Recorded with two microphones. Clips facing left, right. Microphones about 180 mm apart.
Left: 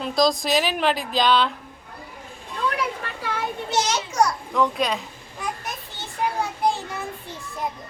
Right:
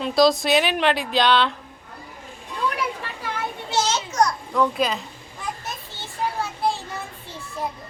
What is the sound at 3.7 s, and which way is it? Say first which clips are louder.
Children playing: right 1 dB; 10° left (ahead or behind).